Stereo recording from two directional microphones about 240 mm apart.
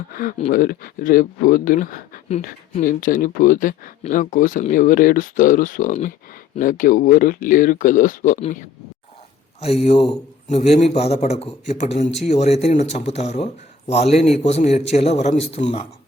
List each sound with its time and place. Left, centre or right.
0.1 s speech: left
9.8 s a man's voice: left